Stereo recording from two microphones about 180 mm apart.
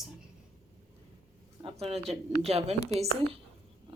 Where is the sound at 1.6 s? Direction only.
35° right (ahead or behind).